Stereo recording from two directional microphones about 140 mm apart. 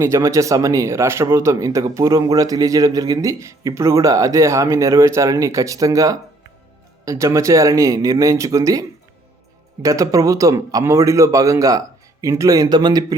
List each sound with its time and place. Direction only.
0.0 s speech: 20° right (ahead or behind)
9.8 s speech: 25° right (ahead or behind)